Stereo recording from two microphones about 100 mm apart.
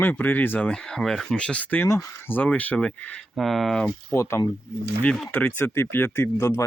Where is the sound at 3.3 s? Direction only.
Centre (ahead or behind).